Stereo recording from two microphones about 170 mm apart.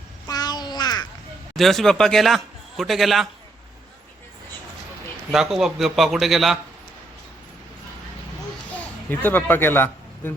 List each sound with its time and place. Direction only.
0.3 s crow: 25° left (ahead or behind)
1.5 s speech: centre (ahead or behind)
5.3 s a man's voice: centre (ahead or behind)
8.8 s speech: 10° left (ahead or behind)